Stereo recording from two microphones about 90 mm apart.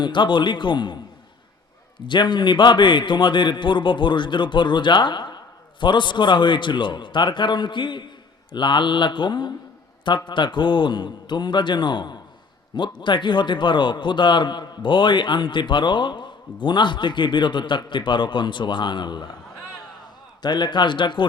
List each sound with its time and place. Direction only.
0.0 s a man's voice: 60° left (ahead or behind)
2.0 s a man's voice: 60° left (ahead or behind)
20.4 s a man's voice: 55° left (ahead or behind)